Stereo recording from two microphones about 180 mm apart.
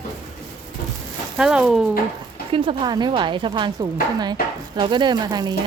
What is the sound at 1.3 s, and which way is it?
Speech, 5° right (ahead or behind).